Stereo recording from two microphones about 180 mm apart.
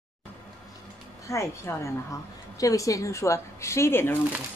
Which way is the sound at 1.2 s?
15° left (ahead or behind).